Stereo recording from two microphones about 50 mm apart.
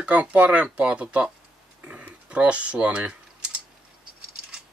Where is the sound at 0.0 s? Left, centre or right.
Right.